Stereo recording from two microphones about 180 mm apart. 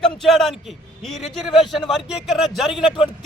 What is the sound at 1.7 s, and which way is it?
A man's voice, centre (ahead or behind).